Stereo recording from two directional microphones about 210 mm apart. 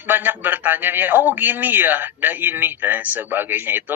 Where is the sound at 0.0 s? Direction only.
10° right (ahead or behind).